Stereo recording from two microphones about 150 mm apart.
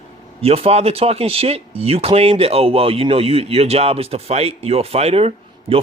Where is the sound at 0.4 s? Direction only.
40° right (ahead or behind).